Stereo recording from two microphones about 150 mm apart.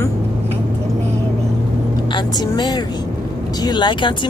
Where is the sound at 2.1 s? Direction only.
30° left (ahead or behind).